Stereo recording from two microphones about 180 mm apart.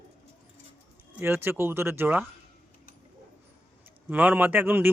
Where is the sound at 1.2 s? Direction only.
15° right (ahead or behind).